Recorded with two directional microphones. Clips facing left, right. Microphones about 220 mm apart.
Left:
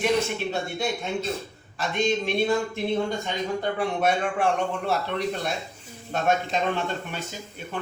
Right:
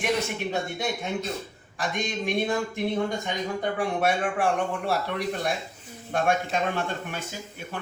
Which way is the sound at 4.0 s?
10° right (ahead or behind).